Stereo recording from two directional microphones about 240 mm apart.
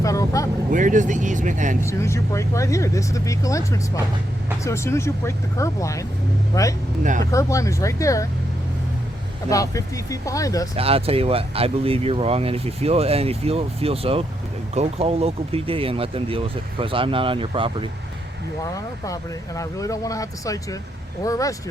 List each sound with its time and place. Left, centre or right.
0.0 s vehicle: centre
0.7 s speech: right
1.8 s speech: centre
9.5 s speech: centre
10.8 s speech: right
18.7 s speech: centre